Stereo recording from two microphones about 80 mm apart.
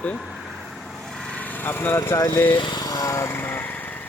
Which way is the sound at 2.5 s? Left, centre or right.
Left.